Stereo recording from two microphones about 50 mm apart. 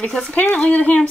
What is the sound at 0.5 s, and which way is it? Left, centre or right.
Speech, left.